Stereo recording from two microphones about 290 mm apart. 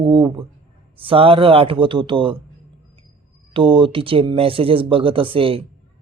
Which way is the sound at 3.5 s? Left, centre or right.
Centre.